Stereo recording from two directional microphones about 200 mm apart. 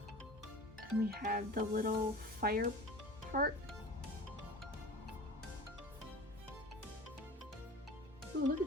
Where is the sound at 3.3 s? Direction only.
45° right (ahead or behind).